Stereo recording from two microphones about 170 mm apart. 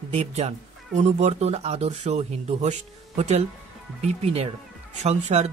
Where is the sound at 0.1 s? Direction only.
40° right (ahead or behind).